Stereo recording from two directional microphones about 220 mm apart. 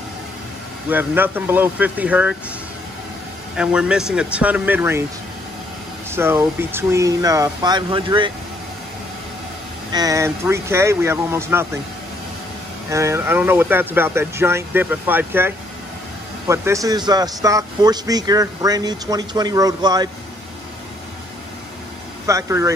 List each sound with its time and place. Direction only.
0.8 s speech: 10° right (ahead or behind)
3.5 s a man's voice: 5° right (ahead or behind)
6.0 s speech: 10° right (ahead or behind)
9.9 s speech: 15° right (ahead or behind)
12.9 s speech: 10° right (ahead or behind)
22.2 s speech: 15° right (ahead or behind)